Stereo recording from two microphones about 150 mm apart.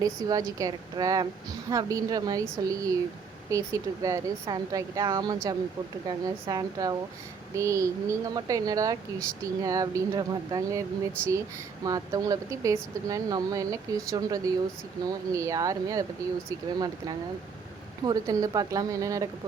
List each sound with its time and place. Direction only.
0.0 s speech: 25° right (ahead or behind)
11.9 s speech: 25° right (ahead or behind)